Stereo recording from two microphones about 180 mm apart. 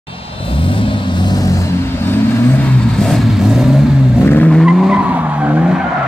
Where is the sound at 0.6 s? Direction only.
30° left (ahead or behind).